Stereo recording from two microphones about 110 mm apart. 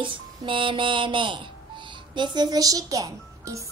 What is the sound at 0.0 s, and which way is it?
Speech, 50° right (ahead or behind).